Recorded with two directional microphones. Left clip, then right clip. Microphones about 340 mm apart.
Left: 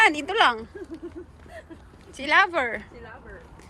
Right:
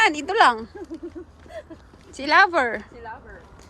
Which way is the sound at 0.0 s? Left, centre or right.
Centre.